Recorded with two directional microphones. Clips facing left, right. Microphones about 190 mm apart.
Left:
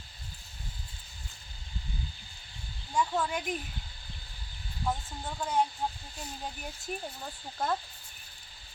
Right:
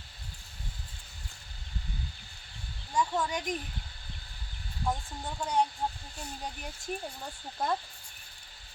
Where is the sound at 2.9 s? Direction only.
5° left (ahead or behind).